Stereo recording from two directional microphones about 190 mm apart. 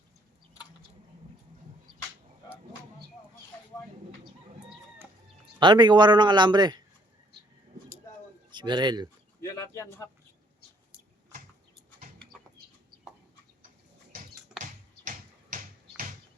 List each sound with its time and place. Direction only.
5.5 s speech: 25° right (ahead or behind)
8.4 s speech: 25° right (ahead or behind)
9.4 s a sound: 15° left (ahead or behind)